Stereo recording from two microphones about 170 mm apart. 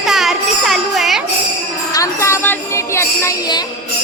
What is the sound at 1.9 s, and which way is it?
Music, 20° left (ahead or behind).